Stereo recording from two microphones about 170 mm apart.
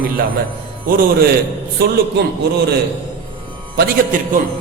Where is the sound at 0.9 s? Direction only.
55° right (ahead or behind).